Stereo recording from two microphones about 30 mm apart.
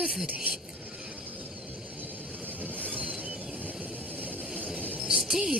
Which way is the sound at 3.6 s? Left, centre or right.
Right.